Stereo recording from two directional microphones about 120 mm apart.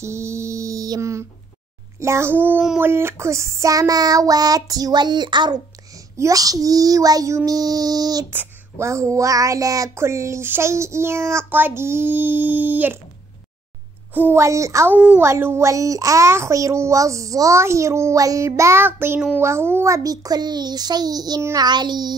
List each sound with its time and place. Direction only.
0.0 s mantra: 25° right (ahead or behind)
2.0 s speech: 25° right (ahead or behind)
2.8 s child singing: 20° right (ahead or behind)
8.3 s speech: 20° right (ahead or behind)
14.1 s speech: 20° right (ahead or behind)
15.0 s a child's voice: 10° right (ahead or behind)
15.2 s speech: 20° right (ahead or behind)
19.3 s child singing: 20° right (ahead or behind)
21.4 s speech: 20° right (ahead or behind)
21.6 s child singing: 35° right (ahead or behind)